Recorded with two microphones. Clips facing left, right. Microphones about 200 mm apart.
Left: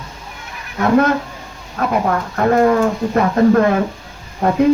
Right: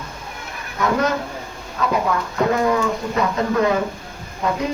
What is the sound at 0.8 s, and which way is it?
Speech, 55° left (ahead or behind).